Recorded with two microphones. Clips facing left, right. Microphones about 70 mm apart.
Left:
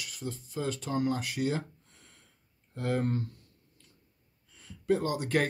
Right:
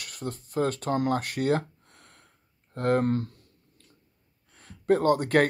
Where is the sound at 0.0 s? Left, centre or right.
Right.